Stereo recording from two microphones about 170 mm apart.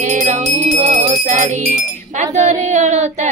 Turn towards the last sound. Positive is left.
turn(degrees=-45)  # may be behind; listen again after turning